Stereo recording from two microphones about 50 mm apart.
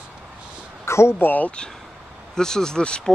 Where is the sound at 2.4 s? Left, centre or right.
Centre.